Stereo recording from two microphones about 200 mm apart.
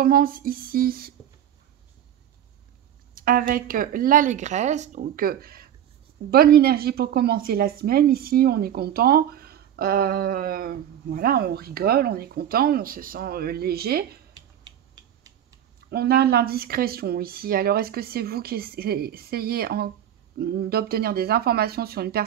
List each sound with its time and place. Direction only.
0.0 s a woman's voice: 45° right (ahead or behind)
3.2 s a woman's voice: 45° right (ahead or behind)
15.9 s a woman's voice: 50° right (ahead or behind)